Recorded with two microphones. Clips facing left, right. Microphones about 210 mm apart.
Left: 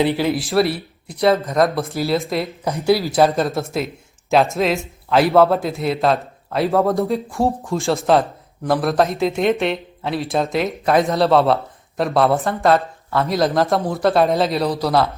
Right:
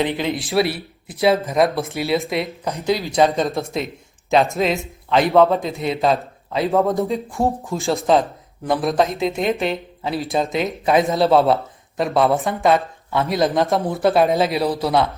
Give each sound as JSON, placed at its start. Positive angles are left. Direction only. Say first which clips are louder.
{"t": 0.2, "sound": "speech", "louder": "left 2 dB", "side_deg": 5}